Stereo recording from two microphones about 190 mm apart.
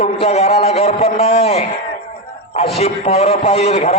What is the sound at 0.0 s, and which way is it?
A man's voice, 30° left (ahead or behind).